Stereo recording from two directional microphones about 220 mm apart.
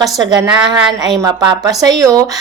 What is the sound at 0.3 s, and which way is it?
A woman's voice, 15° right (ahead or behind).